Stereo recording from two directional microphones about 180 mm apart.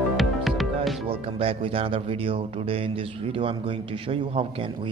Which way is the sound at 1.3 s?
30° right (ahead or behind).